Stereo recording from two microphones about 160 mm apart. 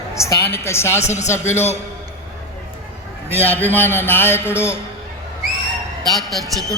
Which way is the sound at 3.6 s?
10° left (ahead or behind).